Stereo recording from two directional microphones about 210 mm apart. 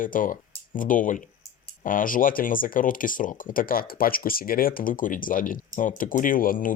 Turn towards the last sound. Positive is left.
turn(degrees=40)  # may be behind; listen again after turning